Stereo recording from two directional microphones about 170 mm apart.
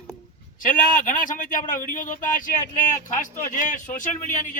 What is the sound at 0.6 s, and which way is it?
Speech, 50° left (ahead or behind).